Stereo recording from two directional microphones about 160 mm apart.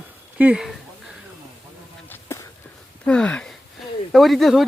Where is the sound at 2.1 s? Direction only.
15° left (ahead or behind).